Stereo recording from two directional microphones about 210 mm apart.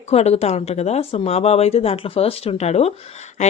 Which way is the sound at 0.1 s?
30° left (ahead or behind).